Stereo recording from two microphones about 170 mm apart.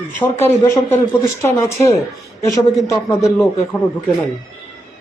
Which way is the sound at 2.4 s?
20° left (ahead or behind).